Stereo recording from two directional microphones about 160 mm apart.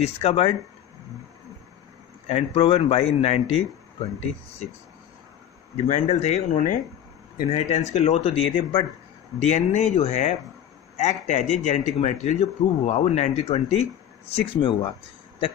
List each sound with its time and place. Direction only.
0.0 s a man's voice: 40° left (ahead or behind)
2.2 s a man's voice: 35° left (ahead or behind)
5.8 s a man's voice: 45° left (ahead or behind)
9.4 s a man's voice: 45° left (ahead or behind); by 14.9 s 30° left (ahead or behind)